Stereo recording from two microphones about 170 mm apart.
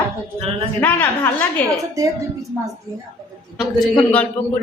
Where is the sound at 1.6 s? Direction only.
10° left (ahead or behind).